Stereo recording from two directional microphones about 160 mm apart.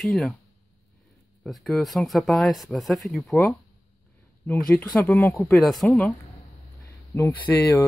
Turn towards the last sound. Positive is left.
turn(degrees=15)  # may be behind; listen again after turning